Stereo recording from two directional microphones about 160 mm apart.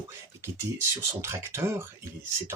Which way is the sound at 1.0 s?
15° right (ahead or behind).